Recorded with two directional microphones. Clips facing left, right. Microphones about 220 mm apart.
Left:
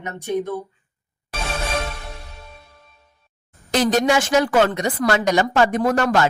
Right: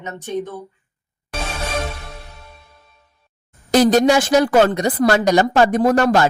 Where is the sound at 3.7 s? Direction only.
35° right (ahead or behind).